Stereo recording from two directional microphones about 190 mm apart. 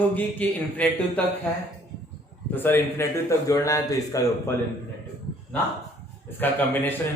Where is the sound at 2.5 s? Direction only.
10° left (ahead or behind).